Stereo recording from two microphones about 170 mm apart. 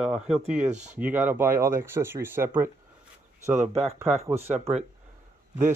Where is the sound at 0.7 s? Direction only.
45° right (ahead or behind).